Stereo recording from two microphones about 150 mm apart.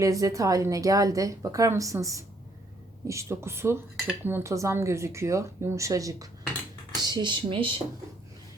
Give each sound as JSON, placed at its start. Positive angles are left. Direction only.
{"t": 0.0, "sound": "speech", "side_deg": -20}